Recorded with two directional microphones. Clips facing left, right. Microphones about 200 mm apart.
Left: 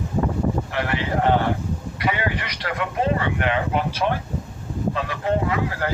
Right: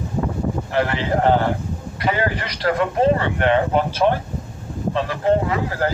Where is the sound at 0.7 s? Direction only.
35° right (ahead or behind).